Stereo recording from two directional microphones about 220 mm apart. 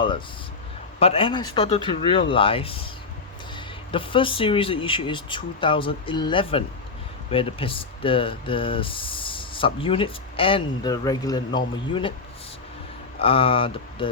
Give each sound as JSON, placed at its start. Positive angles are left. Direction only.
{"t": 0.9, "sound": "speech", "side_deg": 25}
{"t": 13.1, "sound": "speech", "side_deg": 25}